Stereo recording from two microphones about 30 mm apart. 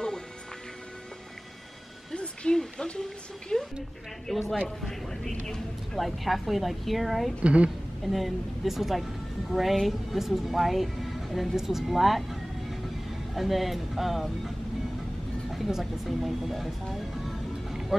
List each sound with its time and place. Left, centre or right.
2.5 s a sound: centre
4.3 s speech: centre
5.9 s speech: centre
7.4 s a woman's voice: right
8.0 s speech: centre
15.5 s speech: centre
16.9 s music: centre